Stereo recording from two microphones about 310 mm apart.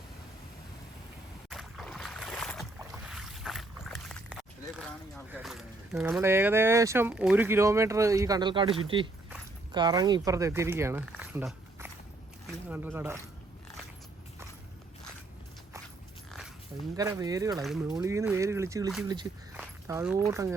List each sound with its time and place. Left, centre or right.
1.5 s boat: centre
5.1 s speech: centre
17.0 s speech: centre
17.6 s speech: centre